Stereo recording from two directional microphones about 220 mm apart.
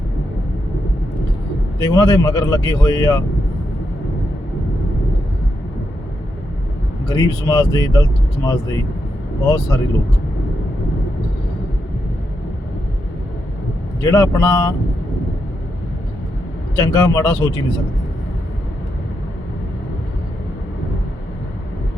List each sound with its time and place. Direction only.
1.8 s speech: 15° left (ahead or behind)
7.1 s speech: 15° left (ahead or behind)
14.0 s speech: 15° left (ahead or behind)
16.7 s speech: 15° left (ahead or behind)